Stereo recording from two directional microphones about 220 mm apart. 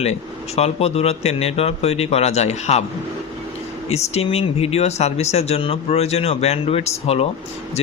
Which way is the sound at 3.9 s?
30° left (ahead or behind).